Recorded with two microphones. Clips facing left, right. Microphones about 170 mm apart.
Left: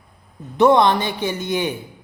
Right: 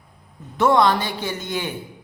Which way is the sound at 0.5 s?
20° left (ahead or behind).